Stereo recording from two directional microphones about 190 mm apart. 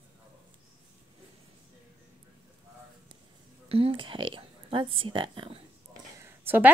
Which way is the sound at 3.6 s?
30° right (ahead or behind).